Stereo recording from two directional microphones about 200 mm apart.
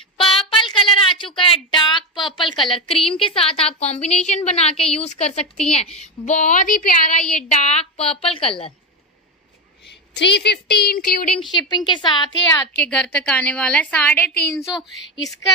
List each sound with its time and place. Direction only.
0.2 s a sound: 25° left (ahead or behind)
3.1 s a woman's voice: 25° left (ahead or behind); by 7.2 s 45° left (ahead or behind)
7.5 s a woman's voice: 30° left (ahead or behind)
10.1 s a woman's voice: 60° left (ahead or behind)
11.2 s a woman's voice: 5° left (ahead or behind)
11.7 s a woman's voice: 25° left (ahead or behind)
12.7 s a woman's voice: 5° left (ahead or behind)